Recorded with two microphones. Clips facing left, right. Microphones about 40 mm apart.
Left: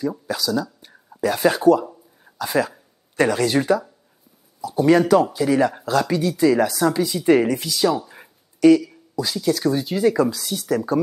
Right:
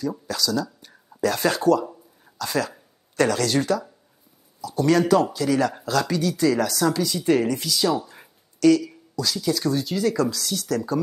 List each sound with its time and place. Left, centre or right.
0.3 s speech: centre